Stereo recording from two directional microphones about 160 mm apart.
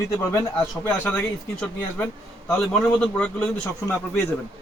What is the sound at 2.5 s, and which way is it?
Speech, 5° left (ahead or behind).